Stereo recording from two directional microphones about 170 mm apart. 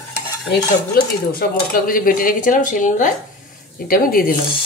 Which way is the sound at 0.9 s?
60° left (ahead or behind).